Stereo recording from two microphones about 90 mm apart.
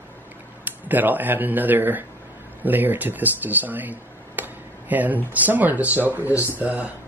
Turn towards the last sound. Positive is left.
turn(degrees=-15)  # may be behind; listen again after turning